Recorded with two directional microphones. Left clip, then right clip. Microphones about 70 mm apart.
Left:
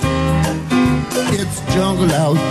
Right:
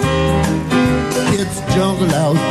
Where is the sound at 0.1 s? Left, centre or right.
Left.